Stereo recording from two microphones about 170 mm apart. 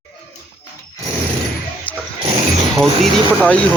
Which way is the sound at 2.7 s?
5° left (ahead or behind).